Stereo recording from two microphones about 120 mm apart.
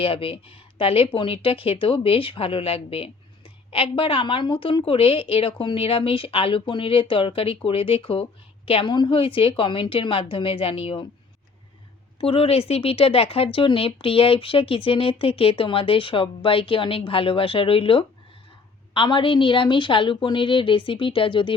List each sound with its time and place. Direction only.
0.0 s speech: 50° left (ahead or behind)
12.2 s speech: 50° left (ahead or behind)